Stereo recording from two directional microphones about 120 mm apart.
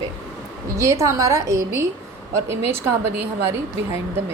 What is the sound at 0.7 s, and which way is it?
A woman's voice, 25° right (ahead or behind).